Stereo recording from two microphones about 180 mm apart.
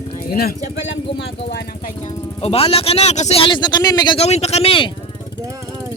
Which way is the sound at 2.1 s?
35° left (ahead or behind).